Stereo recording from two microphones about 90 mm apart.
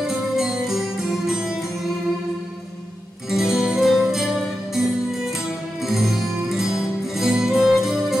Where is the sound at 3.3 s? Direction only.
5° right (ahead or behind).